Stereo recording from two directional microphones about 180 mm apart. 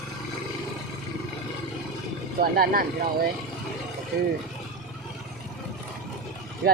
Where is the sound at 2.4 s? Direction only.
55° right (ahead or behind).